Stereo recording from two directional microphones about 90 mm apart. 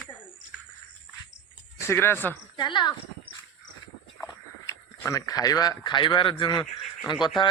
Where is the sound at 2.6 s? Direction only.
55° left (ahead or behind).